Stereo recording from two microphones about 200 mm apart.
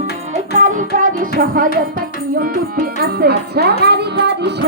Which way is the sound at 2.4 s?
45° right (ahead or behind).